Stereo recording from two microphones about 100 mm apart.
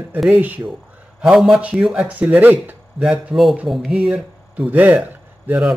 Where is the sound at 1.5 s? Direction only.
15° right (ahead or behind).